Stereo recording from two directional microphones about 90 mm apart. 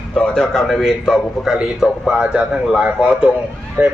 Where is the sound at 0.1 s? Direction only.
5° left (ahead or behind); by 3.3 s 10° right (ahead or behind).